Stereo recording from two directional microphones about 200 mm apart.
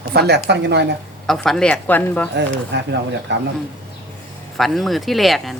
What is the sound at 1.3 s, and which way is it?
A woman's voice, centre (ahead or behind).